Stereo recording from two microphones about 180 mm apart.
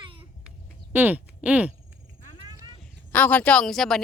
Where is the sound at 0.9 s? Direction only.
10° right (ahead or behind).